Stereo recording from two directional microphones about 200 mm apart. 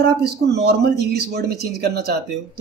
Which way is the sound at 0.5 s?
55° right (ahead or behind).